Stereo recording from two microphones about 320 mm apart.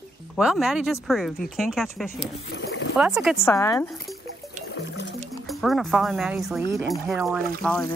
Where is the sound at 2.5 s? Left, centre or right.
Left.